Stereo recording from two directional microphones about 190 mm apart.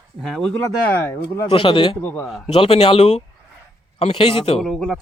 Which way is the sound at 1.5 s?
25° left (ahead or behind).